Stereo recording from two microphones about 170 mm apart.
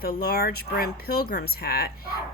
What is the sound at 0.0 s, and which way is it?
Speech, 65° left (ahead or behind).